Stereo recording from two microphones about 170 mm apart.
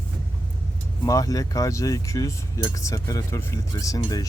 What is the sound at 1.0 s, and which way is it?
Speech, 20° left (ahead or behind).